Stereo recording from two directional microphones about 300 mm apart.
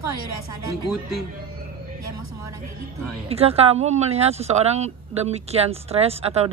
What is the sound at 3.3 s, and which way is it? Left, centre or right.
Speech, centre.